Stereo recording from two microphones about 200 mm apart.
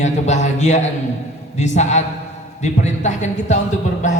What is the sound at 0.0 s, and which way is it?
A man's voice, 35° left (ahead or behind).